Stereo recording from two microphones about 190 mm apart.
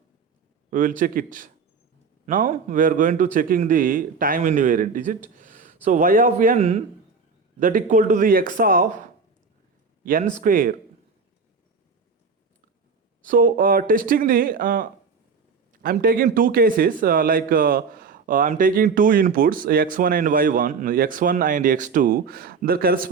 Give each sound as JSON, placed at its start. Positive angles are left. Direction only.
{"t": 0.7, "sound": "a man's voice", "side_deg": -45}
{"t": 6.6, "sound": "speech", "side_deg": -30}
{"t": 7.6, "sound": "speech", "side_deg": -45}
{"t": 13.2, "sound": "speech", "side_deg": -45}